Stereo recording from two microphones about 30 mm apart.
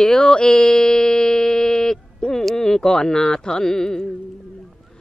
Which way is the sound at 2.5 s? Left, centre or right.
Centre.